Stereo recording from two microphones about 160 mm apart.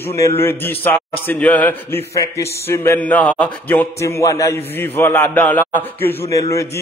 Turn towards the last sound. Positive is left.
turn(degrees=20)  # may be behind; listen again after turning